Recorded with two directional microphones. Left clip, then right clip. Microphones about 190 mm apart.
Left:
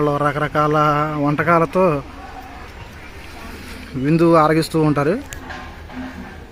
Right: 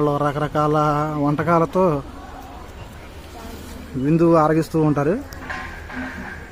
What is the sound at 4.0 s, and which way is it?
A man's voice, 15° left (ahead or behind).